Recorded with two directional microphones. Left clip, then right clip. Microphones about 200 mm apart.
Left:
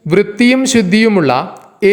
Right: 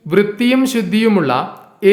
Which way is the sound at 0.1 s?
25° left (ahead or behind).